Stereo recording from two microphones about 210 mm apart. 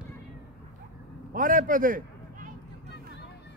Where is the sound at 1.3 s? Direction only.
40° right (ahead or behind).